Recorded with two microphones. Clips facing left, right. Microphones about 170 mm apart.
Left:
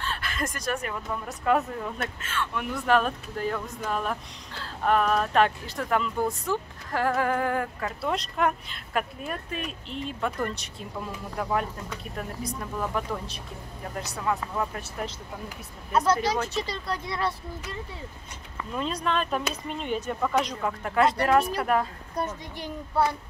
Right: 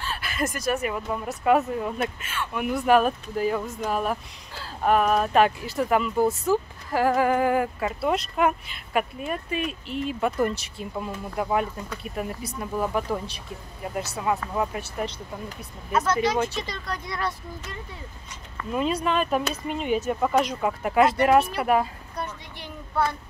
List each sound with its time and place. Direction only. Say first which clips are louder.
0.0 s speech: right 3 dB; 10° right (ahead or behind)
16.1 s speech: right 4 dB; 35° left (ahead or behind)
18.7 s speech: right 4 dB; 5° right (ahead or behind)
22.1 s a child's voice: left 3 dB; 45° left (ahead or behind)